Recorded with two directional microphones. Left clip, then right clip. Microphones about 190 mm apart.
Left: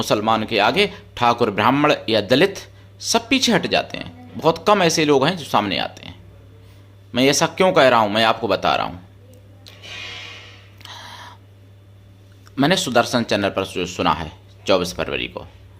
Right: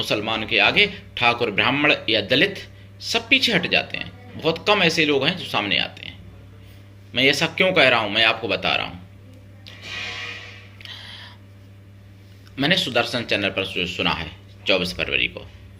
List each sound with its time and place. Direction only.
0.0 s speech: 30° left (ahead or behind)
10.8 s a sound: 30° left (ahead or behind)
12.5 s speech: 30° left (ahead or behind)